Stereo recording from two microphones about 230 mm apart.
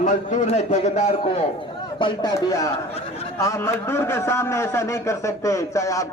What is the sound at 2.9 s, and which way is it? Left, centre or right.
Speech, left.